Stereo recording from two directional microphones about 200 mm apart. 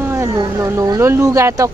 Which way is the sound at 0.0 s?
10° right (ahead or behind).